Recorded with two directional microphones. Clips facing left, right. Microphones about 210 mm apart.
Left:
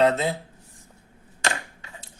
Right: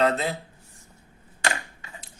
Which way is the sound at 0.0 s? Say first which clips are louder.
Left 3 dB; 25° left (ahead or behind).